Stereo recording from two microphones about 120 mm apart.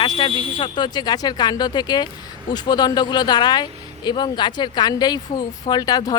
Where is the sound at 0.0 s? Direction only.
40° left (ahead or behind).